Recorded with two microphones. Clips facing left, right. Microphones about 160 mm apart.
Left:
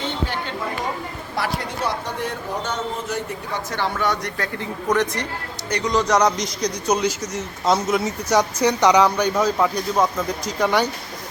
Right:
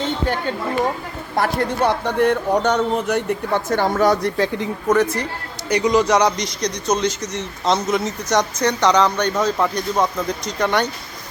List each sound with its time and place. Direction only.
1.4 s speech: 60° right (ahead or behind); by 4.3 s 40° right (ahead or behind)
4.9 s a man's voice: 5° right (ahead or behind)